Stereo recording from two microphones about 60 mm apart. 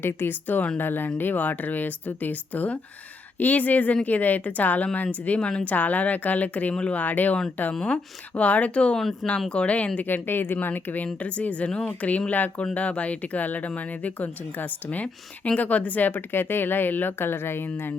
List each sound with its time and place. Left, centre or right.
0.0 s speech: left
10.1 s speech: left